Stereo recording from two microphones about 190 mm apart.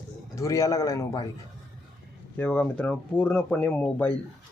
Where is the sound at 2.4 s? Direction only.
5° left (ahead or behind).